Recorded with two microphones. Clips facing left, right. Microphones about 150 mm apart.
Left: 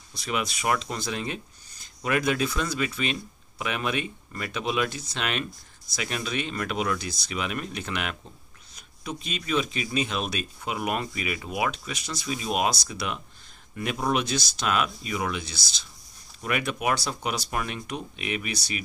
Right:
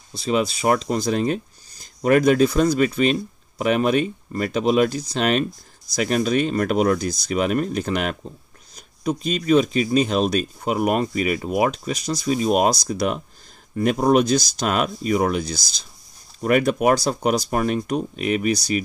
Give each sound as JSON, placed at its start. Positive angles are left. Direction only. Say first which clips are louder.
{"t": 0.1, "sound": "speech", "louder": "right 9 dB", "side_deg": -30}